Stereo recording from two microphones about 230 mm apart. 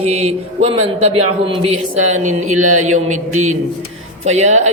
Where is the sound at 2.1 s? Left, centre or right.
Right.